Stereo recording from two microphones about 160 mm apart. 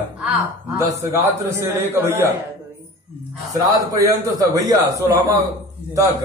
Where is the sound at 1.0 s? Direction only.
20° right (ahead or behind).